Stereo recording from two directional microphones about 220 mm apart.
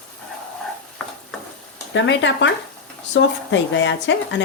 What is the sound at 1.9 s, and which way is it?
Speech, 55° left (ahead or behind).